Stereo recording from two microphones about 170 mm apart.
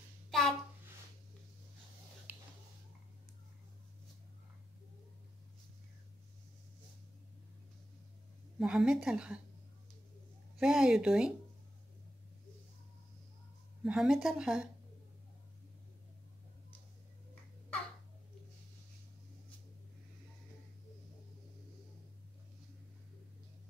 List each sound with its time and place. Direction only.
0.3 s a sound: centre (ahead or behind)
8.5 s a woman's voice: 5° right (ahead or behind)
10.6 s a woman's voice: 5° right (ahead or behind)
13.8 s a woman's voice: 5° right (ahead or behind)